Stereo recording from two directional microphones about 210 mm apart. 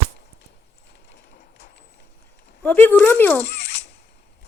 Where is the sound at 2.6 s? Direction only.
10° left (ahead or behind).